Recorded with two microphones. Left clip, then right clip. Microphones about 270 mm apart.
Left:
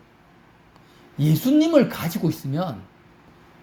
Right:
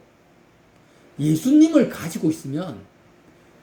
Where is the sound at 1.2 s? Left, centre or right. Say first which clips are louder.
Right 3 dB; left.